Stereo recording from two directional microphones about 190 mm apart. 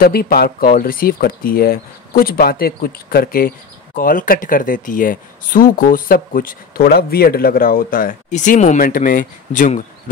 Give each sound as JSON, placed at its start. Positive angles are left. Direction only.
{"t": 0.0, "sound": "speech", "side_deg": 55}